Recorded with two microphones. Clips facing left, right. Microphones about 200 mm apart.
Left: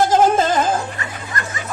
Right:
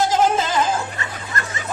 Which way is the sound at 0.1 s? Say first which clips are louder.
Left 4 dB; 50° left (ahead or behind).